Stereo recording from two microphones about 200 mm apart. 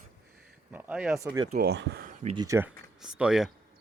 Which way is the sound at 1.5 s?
50° right (ahead or behind).